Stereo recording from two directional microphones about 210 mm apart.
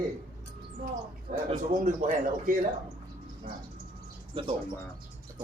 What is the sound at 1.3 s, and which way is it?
Speech, 35° right (ahead or behind).